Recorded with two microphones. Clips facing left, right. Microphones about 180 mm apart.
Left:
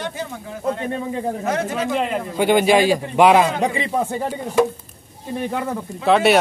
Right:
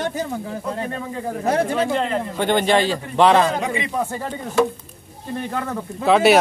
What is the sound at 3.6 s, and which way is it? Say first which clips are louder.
Speech: left 3 dB; 35° left (ahead or behind).